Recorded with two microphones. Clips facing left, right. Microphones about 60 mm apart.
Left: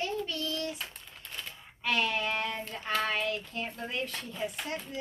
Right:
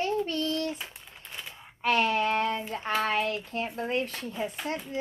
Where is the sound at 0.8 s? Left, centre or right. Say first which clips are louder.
Right 1 dB; centre.